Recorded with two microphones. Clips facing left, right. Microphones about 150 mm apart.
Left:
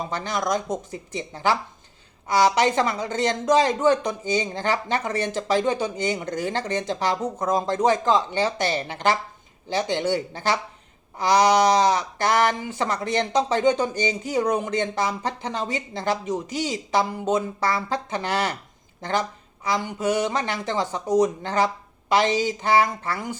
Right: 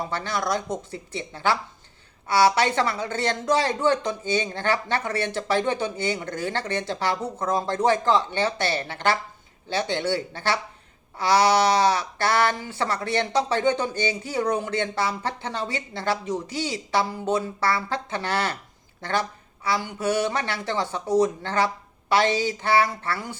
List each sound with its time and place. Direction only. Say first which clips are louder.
0.0 s speech: left 1 dB; 20° left (ahead or behind)
19.6 s speech: left 1 dB; 15° left (ahead or behind)